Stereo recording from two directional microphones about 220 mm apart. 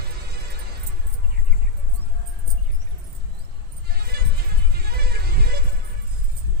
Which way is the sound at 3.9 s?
45° right (ahead or behind).